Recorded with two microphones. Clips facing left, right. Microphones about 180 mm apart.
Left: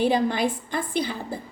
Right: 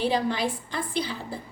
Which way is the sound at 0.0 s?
50° left (ahead or behind).